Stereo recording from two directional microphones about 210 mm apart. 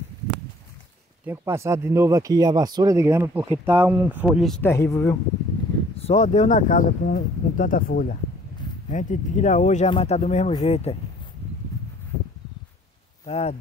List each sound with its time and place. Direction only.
1.2 s speech: 10° right (ahead or behind)
4.6 s speech: 15° left (ahead or behind)
6.0 s speech: 35° left (ahead or behind)
13.2 s speech: 30° left (ahead or behind)